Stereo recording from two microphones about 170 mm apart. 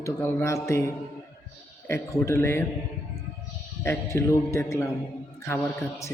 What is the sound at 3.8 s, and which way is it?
A man's voice, 15° left (ahead or behind).